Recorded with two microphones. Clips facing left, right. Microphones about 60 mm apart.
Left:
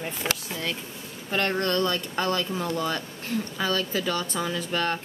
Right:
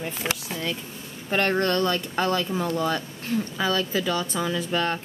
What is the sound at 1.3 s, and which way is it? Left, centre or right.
A woman's voice, right.